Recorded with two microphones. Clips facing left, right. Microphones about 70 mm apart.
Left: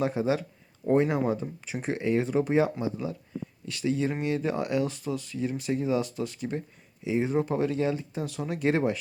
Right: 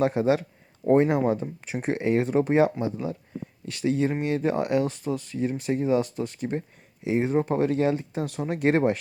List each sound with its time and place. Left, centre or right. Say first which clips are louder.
0.0 s speech: right 4 dB; right
7.0 s speech: right 3 dB; right
7.3 s speech: right 3 dB; right